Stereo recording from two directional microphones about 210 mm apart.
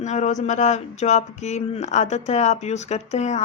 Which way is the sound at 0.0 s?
35° left (ahead or behind).